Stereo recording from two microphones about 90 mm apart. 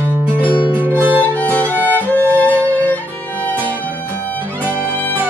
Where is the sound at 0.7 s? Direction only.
20° right (ahead or behind).